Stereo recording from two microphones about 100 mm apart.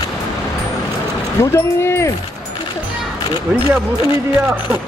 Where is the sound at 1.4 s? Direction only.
25° left (ahead or behind).